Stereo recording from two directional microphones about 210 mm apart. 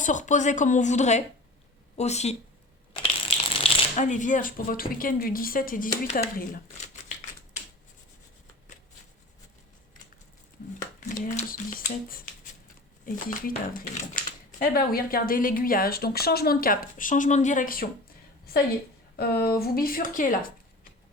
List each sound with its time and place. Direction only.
0.0 s a woman's voice: 35° left (ahead or behind)
11.2 s a woman's voice: 40° left (ahead or behind)
14.6 s a woman's voice: 45° left (ahead or behind)
19.1 s a woman's voice: 45° left (ahead or behind)